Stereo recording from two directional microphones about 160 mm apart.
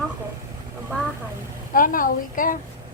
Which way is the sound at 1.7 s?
60° left (ahead or behind).